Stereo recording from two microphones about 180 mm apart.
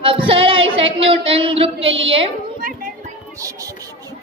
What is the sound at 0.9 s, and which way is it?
Speech, 30° right (ahead or behind).